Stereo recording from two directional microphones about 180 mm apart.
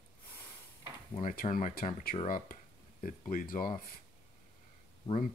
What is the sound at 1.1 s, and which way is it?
Speech, 45° left (ahead or behind).